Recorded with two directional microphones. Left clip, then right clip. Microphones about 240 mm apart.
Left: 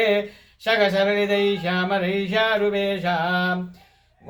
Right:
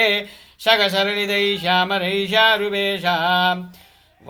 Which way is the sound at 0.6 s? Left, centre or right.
Right.